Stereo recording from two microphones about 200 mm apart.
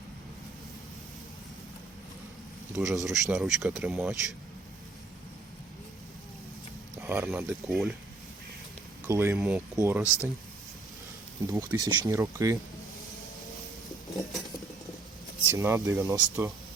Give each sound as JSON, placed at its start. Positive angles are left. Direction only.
{"t": 2.7, "sound": "speech", "side_deg": 0}
{"t": 6.9, "sound": "speech", "side_deg": -10}
{"t": 9.0, "sound": "speech", "side_deg": -15}
{"t": 11.5, "sound": "speech", "side_deg": -15}
{"t": 14.2, "sound": "a sound", "side_deg": 0}
{"t": 15.4, "sound": "speech", "side_deg": -15}